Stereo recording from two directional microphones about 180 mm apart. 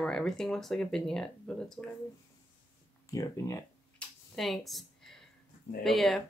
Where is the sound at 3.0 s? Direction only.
20° left (ahead or behind).